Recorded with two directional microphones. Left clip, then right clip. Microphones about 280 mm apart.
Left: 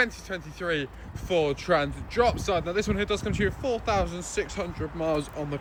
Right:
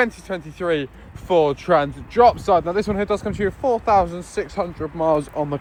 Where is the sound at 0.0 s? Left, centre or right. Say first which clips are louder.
Right 6 dB; centre.